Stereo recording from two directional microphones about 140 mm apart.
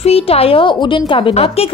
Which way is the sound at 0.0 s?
45° left (ahead or behind).